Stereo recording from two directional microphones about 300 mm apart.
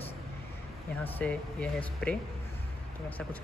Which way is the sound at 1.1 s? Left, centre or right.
Centre.